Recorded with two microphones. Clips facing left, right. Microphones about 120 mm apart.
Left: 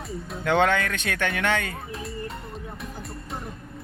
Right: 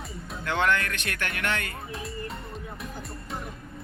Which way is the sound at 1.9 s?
Centre (ahead or behind).